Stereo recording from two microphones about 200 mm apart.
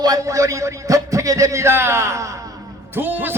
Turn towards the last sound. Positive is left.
turn(degrees=-10)  # may be behind; listen again after turning